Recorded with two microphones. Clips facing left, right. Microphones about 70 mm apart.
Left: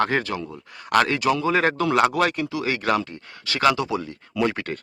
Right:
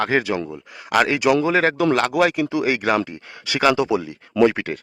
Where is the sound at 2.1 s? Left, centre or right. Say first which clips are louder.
Right 4 dB; centre.